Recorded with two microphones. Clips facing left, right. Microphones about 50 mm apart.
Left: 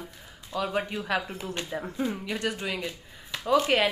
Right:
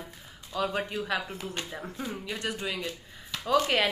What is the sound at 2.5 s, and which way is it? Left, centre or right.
Speech, left.